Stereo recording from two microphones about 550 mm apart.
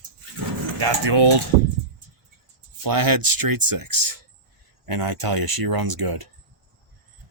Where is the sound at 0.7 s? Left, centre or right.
Right.